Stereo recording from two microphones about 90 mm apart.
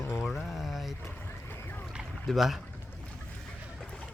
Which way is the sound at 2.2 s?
5° right (ahead or behind).